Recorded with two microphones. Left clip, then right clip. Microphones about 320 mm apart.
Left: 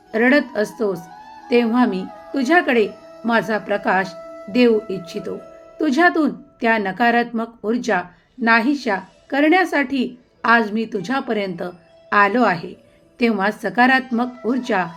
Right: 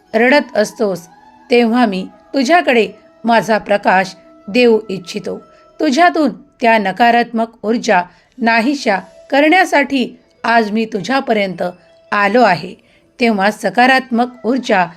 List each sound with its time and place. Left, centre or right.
0.1 s a woman's voice: right